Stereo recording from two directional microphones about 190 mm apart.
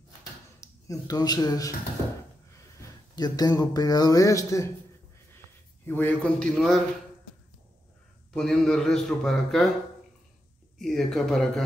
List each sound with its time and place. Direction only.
0.6 s speech: 20° left (ahead or behind)
3.2 s speech: 20° left (ahead or behind)
5.9 s a man's voice: 10° left (ahead or behind)
8.3 s a man's voice: centre (ahead or behind)
10.8 s a man's voice: centre (ahead or behind)